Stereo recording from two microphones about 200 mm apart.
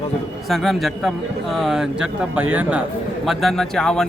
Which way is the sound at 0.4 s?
Centre (ahead or behind).